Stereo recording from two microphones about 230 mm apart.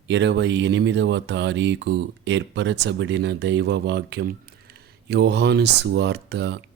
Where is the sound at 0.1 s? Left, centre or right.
Right.